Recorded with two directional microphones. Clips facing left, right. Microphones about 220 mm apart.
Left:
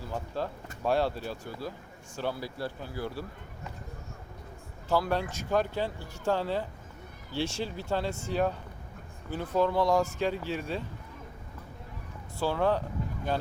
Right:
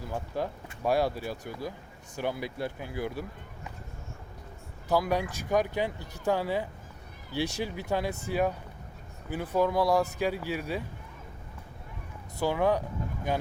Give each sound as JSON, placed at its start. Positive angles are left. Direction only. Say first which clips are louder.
{"t": 0.1, "sound": "speech", "louder": "right 1 dB", "side_deg": -15}
{"t": 4.9, "sound": "speech", "louder": "right 1 dB", "side_deg": -15}
{"t": 12.4, "sound": "speech", "louder": "right 1 dB", "side_deg": -15}